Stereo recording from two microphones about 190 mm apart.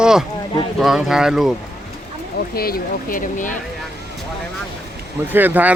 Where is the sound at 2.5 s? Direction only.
50° left (ahead or behind).